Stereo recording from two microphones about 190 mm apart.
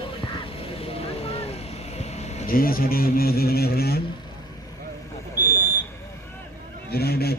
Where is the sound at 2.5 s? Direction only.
50° left (ahead or behind).